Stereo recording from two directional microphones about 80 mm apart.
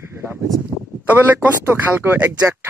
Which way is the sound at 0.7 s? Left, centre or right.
Right.